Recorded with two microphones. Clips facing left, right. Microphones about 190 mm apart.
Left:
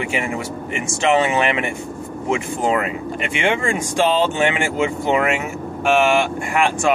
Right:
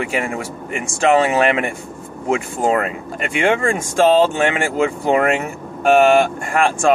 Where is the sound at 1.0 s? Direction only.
45° right (ahead or behind).